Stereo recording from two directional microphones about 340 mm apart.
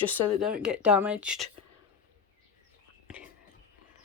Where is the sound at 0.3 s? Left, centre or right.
Centre.